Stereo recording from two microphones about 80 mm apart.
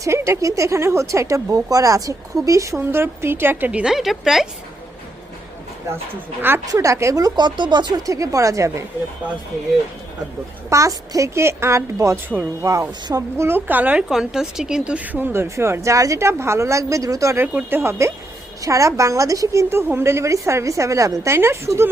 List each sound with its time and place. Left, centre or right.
0.0 s speech: right
3.7 s a woman's voice: centre
3.9 s a woman's voice: centre
6.7 s speech: right
8.0 s speech: right
10.7 s speech: right
13.3 s a woman's voice: right
14.1 s speech: centre; by 17.3 s right
17.3 s a woman's voice: right
17.7 s speech: right